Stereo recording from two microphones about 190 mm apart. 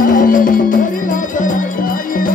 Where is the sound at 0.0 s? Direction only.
45° left (ahead or behind).